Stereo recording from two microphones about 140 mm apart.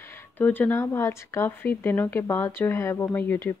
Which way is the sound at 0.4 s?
15° left (ahead or behind).